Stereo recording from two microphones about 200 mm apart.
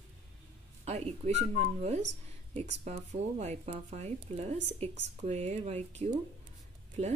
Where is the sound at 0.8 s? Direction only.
30° right (ahead or behind).